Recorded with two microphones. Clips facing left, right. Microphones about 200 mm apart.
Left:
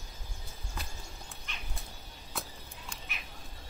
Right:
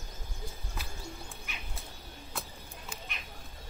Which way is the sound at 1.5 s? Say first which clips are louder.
Right 1 dB; 10° right (ahead or behind).